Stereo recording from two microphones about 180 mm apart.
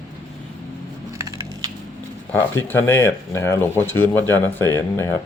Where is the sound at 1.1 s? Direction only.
15° right (ahead or behind).